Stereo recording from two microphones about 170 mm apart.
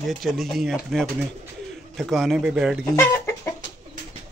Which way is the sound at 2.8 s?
15° left (ahead or behind).